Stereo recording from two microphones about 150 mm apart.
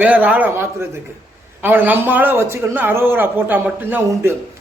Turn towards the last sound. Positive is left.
turn(degrees=-10)  # may be behind; listen again after turning